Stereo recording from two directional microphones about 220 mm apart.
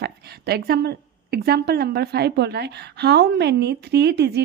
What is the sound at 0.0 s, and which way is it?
A woman's voice, 45° right (ahead or behind).